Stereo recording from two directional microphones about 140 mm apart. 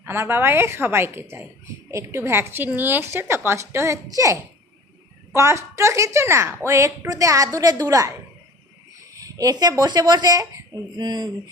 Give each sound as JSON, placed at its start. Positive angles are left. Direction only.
{"t": 0.0, "sound": "speech", "side_deg": -15}
{"t": 9.1, "sound": "speech", "side_deg": -25}